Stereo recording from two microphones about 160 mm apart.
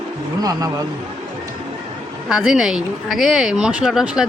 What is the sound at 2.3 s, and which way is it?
Speech, 5° right (ahead or behind).